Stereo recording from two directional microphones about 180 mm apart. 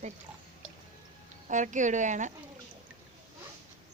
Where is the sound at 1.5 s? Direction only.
45° right (ahead or behind).